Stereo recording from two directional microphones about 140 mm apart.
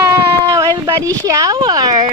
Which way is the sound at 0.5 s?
25° right (ahead or behind).